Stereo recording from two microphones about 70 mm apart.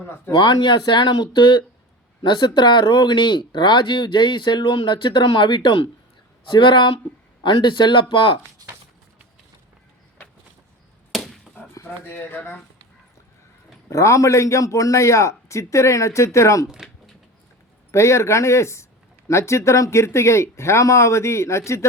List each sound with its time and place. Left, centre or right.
0.3 s speech: left
11.1 s chop: centre
11.9 s speech: left
13.9 s a man's voice: left
16.6 s speech: centre
17.9 s a man's voice: left